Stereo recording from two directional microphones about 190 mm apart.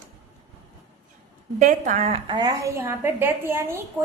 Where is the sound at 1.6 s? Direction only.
40° right (ahead or behind); by 3.8 s 15° right (ahead or behind).